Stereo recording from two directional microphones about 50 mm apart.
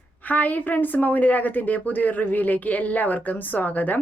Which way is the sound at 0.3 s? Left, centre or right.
Left.